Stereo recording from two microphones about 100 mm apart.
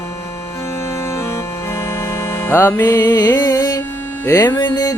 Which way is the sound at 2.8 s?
40° left (ahead or behind).